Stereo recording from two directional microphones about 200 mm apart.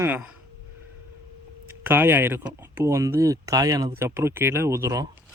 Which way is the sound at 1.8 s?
10° right (ahead or behind).